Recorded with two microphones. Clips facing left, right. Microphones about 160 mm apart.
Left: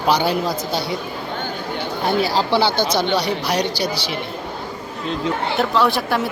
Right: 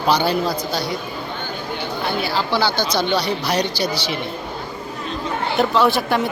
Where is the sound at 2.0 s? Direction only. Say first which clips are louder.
Left 5 dB; 40° left (ahead or behind).